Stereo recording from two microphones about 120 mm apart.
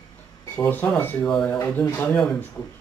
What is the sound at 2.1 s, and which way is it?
Speech, 5° left (ahead or behind).